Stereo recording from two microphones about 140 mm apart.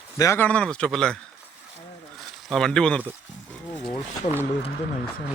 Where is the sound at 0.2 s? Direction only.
15° left (ahead or behind).